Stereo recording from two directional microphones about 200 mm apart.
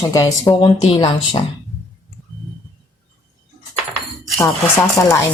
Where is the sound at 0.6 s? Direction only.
25° left (ahead or behind).